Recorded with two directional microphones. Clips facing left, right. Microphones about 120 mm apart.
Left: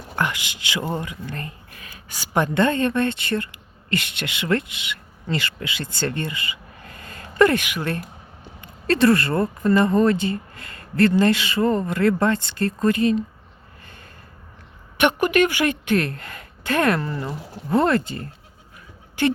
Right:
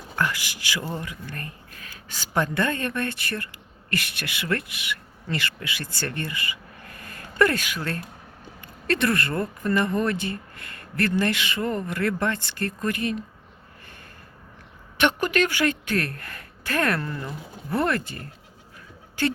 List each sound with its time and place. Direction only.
0.2 s speech: 20° left (ahead or behind)
1.8 s a woman's voice: 10° left (ahead or behind)
8.6 s speech: 30° left (ahead or behind)
14.9 s speech: 15° left (ahead or behind)
19.2 s speech: 15° left (ahead or behind)